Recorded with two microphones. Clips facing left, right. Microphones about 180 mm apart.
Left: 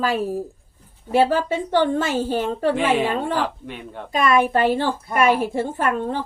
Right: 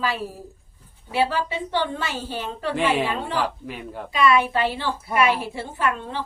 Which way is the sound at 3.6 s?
5° right (ahead or behind).